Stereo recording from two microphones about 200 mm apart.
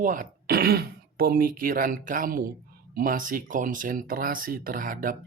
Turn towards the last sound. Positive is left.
turn(degrees=-45)  # may be behind; listen again after turning